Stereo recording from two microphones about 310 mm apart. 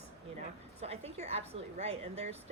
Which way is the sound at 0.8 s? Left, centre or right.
Centre.